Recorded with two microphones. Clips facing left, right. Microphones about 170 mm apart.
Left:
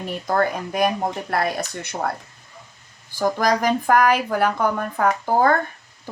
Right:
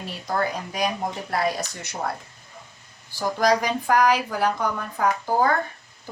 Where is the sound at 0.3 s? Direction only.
50° left (ahead or behind).